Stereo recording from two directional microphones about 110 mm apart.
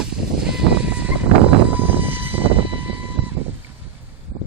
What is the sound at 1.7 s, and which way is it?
Vehicle, 15° right (ahead or behind).